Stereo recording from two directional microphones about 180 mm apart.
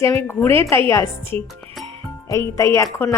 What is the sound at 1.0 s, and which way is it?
Speech, 30° right (ahead or behind).